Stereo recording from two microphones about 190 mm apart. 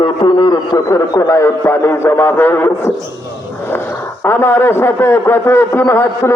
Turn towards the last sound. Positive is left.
turn(degrees=15)  # may be behind; listen again after turning